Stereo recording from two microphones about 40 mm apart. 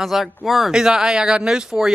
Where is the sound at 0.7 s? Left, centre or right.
Centre.